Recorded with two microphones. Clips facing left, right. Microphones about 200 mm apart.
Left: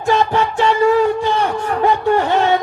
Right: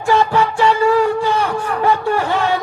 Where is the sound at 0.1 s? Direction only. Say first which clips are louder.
Right 1 dB; 20° left (ahead or behind).